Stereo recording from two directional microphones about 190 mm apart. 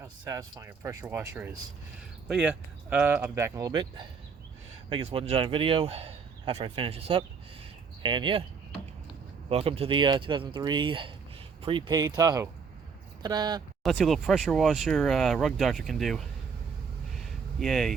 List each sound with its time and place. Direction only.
0.0 s a man's voice: 20° right (ahead or behind)
9.5 s a man's voice: 30° right (ahead or behind)
13.8 s speech: centre (ahead or behind)
17.1 s a sound: centre (ahead or behind)